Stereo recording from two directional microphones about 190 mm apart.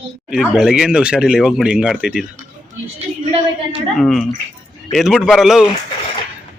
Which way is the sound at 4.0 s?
Centre (ahead or behind).